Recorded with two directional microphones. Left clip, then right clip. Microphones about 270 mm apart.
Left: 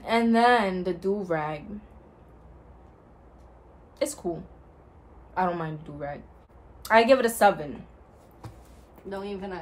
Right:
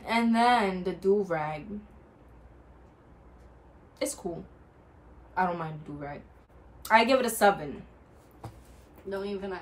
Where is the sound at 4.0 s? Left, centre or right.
Centre.